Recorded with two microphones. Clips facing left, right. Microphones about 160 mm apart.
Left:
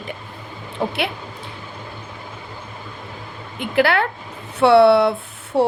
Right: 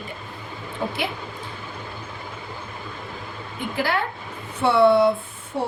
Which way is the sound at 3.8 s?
75° left (ahead or behind).